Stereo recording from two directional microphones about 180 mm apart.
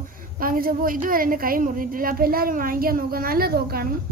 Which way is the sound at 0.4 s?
55° right (ahead or behind).